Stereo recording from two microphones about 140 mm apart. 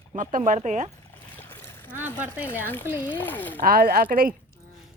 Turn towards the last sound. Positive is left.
turn(degrees=-90)